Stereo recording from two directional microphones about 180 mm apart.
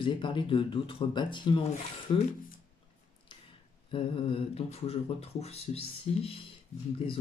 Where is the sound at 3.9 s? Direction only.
30° left (ahead or behind).